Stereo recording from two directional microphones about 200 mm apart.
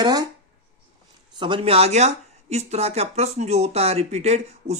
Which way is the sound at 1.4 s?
25° right (ahead or behind).